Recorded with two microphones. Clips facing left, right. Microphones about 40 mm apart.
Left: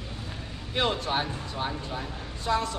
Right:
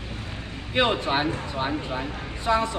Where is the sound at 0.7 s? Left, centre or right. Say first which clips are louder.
Right 5 dB; right.